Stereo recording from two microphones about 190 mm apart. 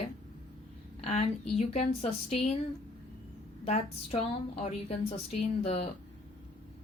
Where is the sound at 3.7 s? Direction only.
35° left (ahead or behind).